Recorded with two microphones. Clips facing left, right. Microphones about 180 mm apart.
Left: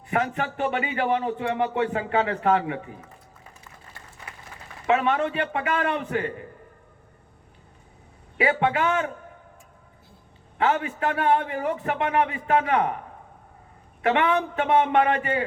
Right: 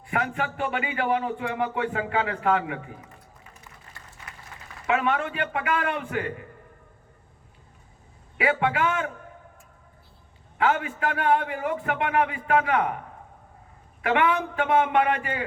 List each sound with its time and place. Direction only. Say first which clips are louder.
0.1 s speech: left 2 dB; 25° left (ahead or behind)
4.9 s speech: left 3 dB; 25° left (ahead or behind)
8.4 s speech: left 1 dB; 25° left (ahead or behind)
10.6 s speech: left 1 dB; 30° left (ahead or behind)
14.0 s speech: left 1 dB; 25° left (ahead or behind)